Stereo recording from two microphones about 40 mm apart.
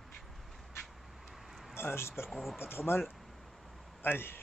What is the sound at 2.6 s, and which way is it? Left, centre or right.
Speech, left.